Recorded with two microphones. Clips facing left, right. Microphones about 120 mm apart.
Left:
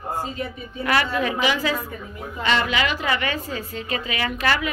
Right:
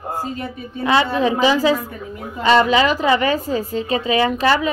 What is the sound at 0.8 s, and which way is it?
A woman's voice, 25° right (ahead or behind).